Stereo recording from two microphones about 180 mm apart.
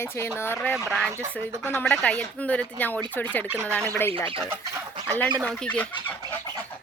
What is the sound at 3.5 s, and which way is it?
Speech, 15° right (ahead or behind).